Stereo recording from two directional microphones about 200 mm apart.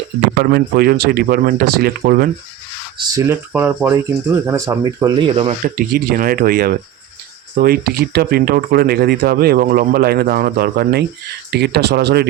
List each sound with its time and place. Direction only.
0.4 s speech: 50° right (ahead or behind)
3.2 s speech: 10° right (ahead or behind); by 5.5 s 30° right (ahead or behind)
5.6 s speech: 45° right (ahead or behind)